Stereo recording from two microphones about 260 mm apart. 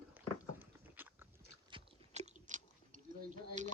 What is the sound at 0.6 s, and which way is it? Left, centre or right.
Dog, centre.